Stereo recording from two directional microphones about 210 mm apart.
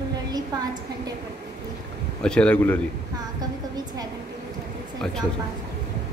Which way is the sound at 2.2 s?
5° left (ahead or behind).